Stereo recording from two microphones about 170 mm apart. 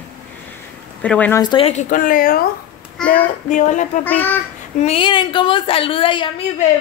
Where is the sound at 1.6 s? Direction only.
50° left (ahead or behind).